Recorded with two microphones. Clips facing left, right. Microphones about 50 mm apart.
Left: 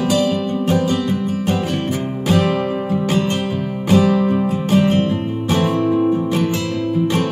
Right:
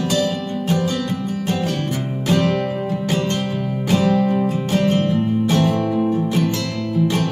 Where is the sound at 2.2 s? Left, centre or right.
Centre.